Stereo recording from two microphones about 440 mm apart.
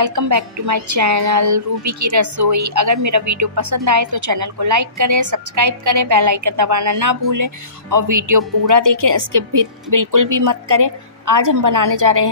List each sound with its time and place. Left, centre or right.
0.0 s a woman's voice: right